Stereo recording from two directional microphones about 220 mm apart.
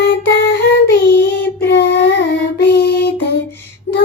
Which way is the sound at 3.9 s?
10° left (ahead or behind).